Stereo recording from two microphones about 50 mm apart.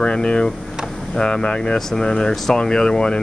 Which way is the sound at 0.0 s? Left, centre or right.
Left.